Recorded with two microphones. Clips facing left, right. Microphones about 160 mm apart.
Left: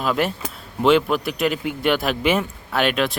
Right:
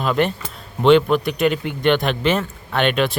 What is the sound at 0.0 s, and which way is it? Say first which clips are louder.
Speech: right 2 dB; 5° left (ahead or behind).